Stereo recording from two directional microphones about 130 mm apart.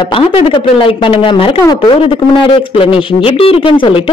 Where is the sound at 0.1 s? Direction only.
45° left (ahead or behind).